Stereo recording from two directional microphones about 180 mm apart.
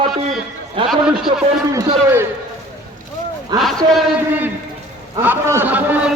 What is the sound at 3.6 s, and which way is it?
A man's voice, centre (ahead or behind).